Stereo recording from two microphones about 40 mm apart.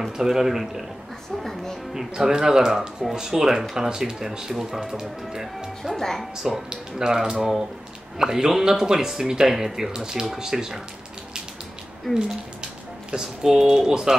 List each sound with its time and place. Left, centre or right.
0.2 s speech: centre
1.4 s music: centre
2.0 s speech: centre
5.9 s speech: centre
6.7 s speech: centre
12.1 s speech: centre
13.1 s speech: centre